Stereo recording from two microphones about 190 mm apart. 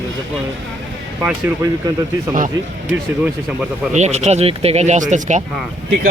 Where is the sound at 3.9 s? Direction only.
35° right (ahead or behind).